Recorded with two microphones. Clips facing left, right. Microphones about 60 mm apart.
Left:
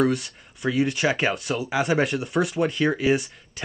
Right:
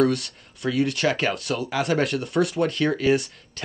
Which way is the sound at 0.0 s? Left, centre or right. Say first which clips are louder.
Right 1 dB; centre.